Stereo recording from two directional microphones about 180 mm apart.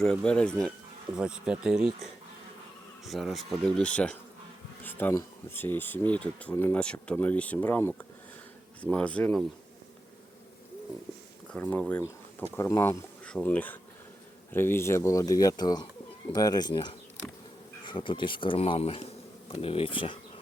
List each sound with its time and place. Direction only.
0.0 s speech: 5° left (ahead or behind)
1.1 s speech: 5° right (ahead or behind)
3.1 s speech: centre (ahead or behind)
11.5 s speech: 5° left (ahead or behind); by 20.1 s 30° left (ahead or behind)